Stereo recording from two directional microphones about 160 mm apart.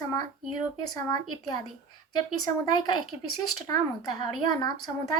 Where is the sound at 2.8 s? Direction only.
25° left (ahead or behind).